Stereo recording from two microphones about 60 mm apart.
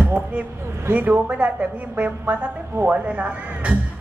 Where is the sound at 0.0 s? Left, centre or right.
Right.